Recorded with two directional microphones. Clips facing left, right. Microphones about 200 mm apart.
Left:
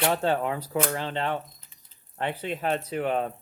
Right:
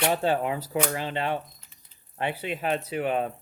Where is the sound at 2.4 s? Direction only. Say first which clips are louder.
Left 2 dB; 5° right (ahead or behind).